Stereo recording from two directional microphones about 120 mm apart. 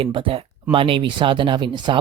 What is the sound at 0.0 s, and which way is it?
Speech, 50° right (ahead or behind).